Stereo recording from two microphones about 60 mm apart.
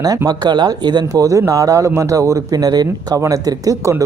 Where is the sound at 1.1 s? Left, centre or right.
Right.